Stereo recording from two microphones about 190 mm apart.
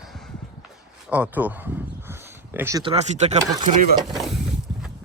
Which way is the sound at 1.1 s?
10° right (ahead or behind).